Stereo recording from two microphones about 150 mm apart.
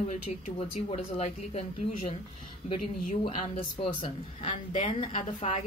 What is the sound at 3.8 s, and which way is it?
A woman's voice, 40° left (ahead or behind).